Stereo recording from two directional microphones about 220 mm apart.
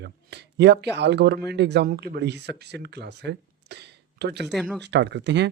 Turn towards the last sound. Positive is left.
turn(degrees=-50)  # may be behind; listen again after turning